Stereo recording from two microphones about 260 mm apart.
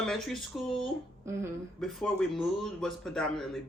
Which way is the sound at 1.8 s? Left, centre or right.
Centre.